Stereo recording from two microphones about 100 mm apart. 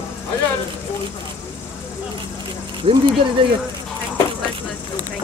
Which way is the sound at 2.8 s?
65° right (ahead or behind).